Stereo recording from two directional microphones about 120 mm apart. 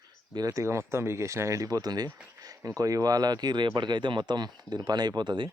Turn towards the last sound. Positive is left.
turn(degrees=-40)  # may be behind; listen again after turning